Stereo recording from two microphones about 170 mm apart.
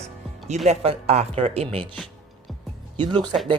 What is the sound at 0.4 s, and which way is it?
Speech, 40° right (ahead or behind).